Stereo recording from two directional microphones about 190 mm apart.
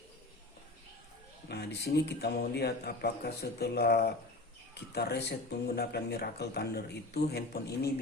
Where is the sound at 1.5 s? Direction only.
60° left (ahead or behind).